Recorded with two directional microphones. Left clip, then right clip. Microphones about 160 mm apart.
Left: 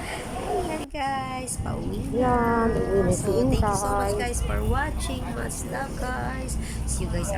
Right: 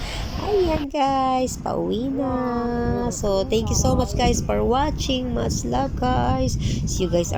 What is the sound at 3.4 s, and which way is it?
A woman's voice, 15° right (ahead or behind).